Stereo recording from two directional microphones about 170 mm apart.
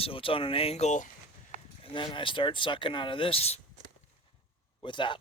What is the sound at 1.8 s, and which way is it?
Speech, 30° left (ahead or behind).